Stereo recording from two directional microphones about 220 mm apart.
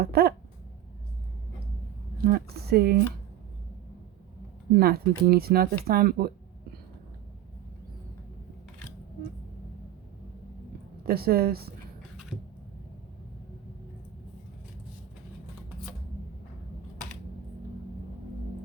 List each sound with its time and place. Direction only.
0.0 s a sound: 45° right (ahead or behind)
2.1 s speech: 45° right (ahead or behind)
4.8 s speech: 45° right (ahead or behind)
11.0 s speech: 45° right (ahead or behind)